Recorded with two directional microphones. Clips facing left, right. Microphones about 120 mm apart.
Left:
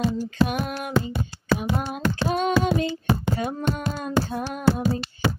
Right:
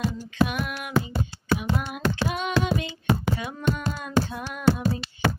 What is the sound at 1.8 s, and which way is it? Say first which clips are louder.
Child singing: left 1 dB; 40° left (ahead or behind).